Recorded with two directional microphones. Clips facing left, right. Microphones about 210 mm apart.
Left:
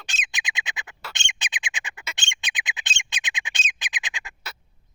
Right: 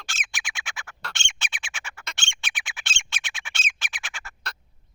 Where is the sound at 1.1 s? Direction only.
15° left (ahead or behind).